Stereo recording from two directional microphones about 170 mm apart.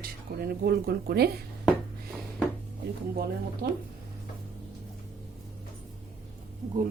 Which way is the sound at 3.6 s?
75° right (ahead or behind).